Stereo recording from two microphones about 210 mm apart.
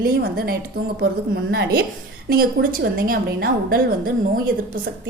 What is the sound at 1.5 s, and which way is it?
A woman's voice, 45° right (ahead or behind).